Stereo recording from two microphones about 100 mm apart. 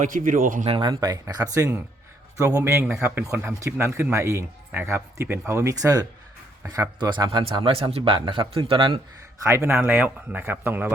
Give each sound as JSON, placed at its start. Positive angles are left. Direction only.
{"t": 0.6, "sound": "speech", "side_deg": -50}
{"t": 0.9, "sound": "speech", "side_deg": -40}
{"t": 3.0, "sound": "speech", "side_deg": -25}
{"t": 6.7, "sound": "speech", "side_deg": -45}
{"t": 7.3, "sound": "speech", "side_deg": -55}
{"t": 9.4, "sound": "speech", "side_deg": -30}